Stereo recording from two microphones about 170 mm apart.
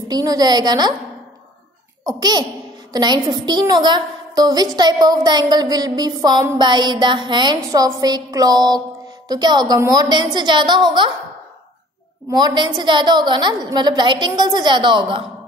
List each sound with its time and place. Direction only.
0.1 s a woman's voice: 20° right (ahead or behind)
2.0 s a woman's voice: 25° right (ahead or behind)
12.3 s a woman's voice: 25° right (ahead or behind)